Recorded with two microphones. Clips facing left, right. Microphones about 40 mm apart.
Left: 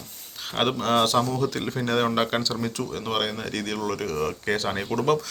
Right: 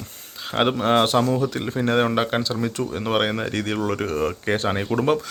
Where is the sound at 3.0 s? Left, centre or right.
Right.